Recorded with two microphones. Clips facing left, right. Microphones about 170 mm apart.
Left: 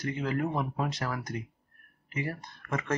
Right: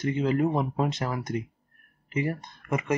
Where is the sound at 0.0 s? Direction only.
25° right (ahead or behind).